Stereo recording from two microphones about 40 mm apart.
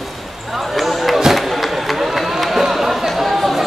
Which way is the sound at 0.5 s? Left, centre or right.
Centre.